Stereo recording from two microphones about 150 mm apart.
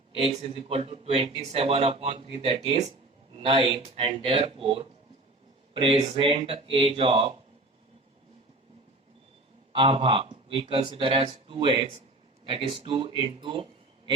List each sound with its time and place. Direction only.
0.1 s speech: 40° right (ahead or behind)
9.7 s speech: 35° right (ahead or behind)